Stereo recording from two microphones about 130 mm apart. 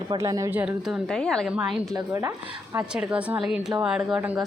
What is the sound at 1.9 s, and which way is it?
Speech, 25° right (ahead or behind).